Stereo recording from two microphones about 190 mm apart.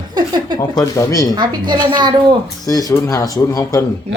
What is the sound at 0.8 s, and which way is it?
Speech, 15° left (ahead or behind).